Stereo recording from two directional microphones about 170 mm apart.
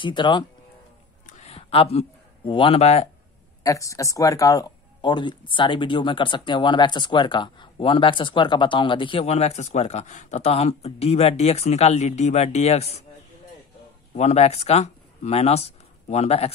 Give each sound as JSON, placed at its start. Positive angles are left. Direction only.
{"t": 0.0, "sound": "speech", "side_deg": 30}
{"t": 1.2, "sound": "a sound", "side_deg": 40}
{"t": 3.6, "sound": "speech", "side_deg": 20}
{"t": 14.1, "sound": "speech", "side_deg": 40}